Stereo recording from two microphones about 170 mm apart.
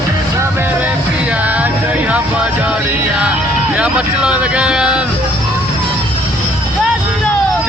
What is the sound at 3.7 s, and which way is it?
Speech, 5° right (ahead or behind).